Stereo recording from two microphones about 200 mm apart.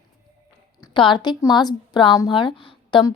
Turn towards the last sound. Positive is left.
turn(degrees=25)  # may be behind; listen again after turning